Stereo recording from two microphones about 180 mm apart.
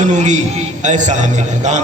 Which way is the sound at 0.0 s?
40° right (ahead or behind).